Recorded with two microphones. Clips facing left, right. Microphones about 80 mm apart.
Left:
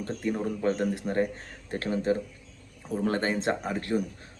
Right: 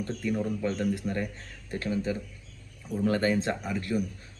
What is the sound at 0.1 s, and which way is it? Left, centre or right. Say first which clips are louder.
Speech: left 2 dB; left.